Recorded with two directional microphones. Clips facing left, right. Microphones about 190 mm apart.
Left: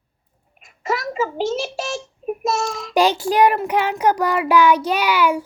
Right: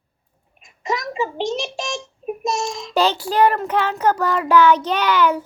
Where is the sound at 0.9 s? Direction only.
15° right (ahead or behind).